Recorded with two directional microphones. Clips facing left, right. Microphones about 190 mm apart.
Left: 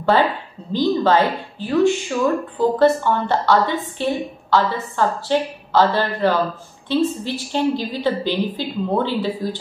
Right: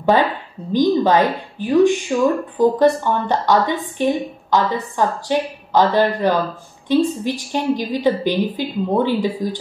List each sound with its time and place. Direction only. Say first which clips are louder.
0.1 s a woman's voice: right 1 dB; 15° right (ahead or behind)